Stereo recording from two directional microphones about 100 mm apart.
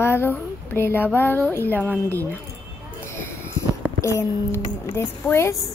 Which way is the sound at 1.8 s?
20° right (ahead or behind).